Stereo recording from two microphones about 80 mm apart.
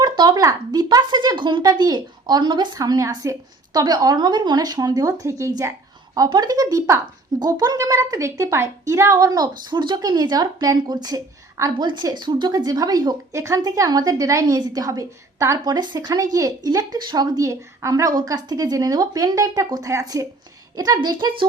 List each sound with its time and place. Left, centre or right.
0.0 s speech: right
1.7 s speech: right
2.7 s a woman's voice: right
6.1 s a woman's voice: right
7.3 s a woman's voice: right
11.8 s speech: right
13.3 s a woman's voice: right
14.4 s a woman's voice: right
15.6 s a woman's voice: right